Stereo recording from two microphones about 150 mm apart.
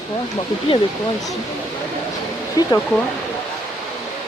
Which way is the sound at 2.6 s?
25° left (ahead or behind).